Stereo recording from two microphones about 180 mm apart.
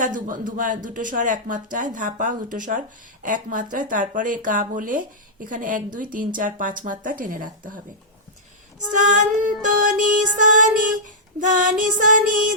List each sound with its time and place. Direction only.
0.0 s speech: 45° right (ahead or behind)
8.9 s speech: 45° right (ahead or behind)